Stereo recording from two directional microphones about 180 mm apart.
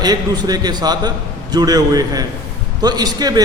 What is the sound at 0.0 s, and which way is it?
A man's voice, 20° right (ahead or behind).